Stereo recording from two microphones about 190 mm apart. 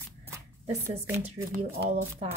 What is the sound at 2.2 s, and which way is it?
Speech, 35° right (ahead or behind).